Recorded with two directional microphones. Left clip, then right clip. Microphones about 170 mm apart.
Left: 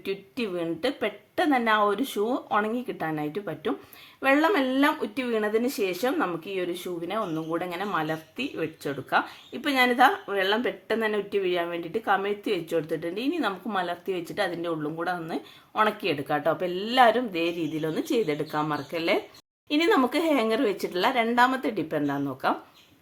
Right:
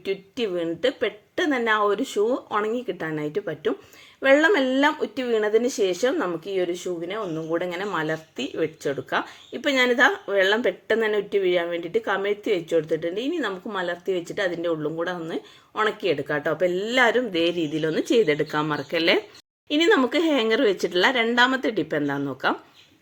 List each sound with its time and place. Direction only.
0.0 s speech: 10° right (ahead or behind)
19.6 s speech: 10° right (ahead or behind)